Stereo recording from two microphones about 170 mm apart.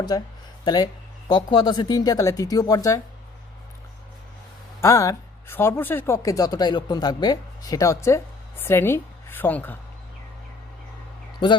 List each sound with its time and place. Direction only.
0.1 s speech: 20° left (ahead or behind)
4.8 s speech: 20° left (ahead or behind)